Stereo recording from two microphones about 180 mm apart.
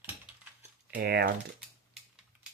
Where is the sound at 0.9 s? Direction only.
65° right (ahead or behind).